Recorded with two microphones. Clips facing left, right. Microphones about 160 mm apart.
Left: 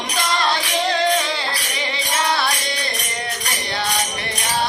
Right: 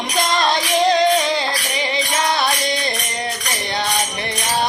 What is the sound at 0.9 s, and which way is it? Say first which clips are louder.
Music: right 2 dB; 15° right (ahead or behind).